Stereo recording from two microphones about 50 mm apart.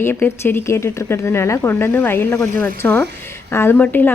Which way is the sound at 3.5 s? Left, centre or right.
Left.